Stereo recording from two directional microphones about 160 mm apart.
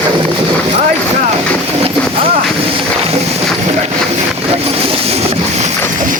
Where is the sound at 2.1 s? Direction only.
35° right (ahead or behind).